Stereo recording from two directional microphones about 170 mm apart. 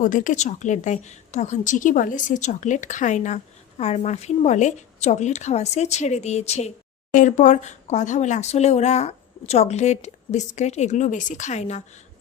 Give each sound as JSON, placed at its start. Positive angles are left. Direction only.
{"t": 0.0, "sound": "a woman's voice", "side_deg": 50}